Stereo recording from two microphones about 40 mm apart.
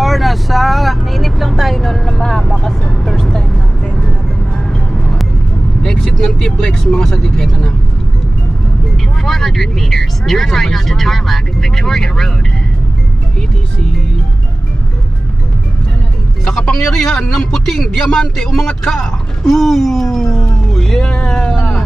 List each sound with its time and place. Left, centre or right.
0.0 s vehicle: centre
5.8 s vehicle: centre
6.7 s speech: centre
9.2 s speech: centre
16.8 s speech: centre
18.9 s a sound: centre
21.0 s music: left